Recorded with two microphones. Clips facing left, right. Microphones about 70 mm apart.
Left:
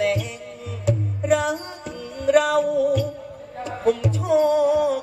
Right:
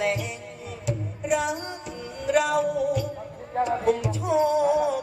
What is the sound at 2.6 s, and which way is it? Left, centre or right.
Music, right.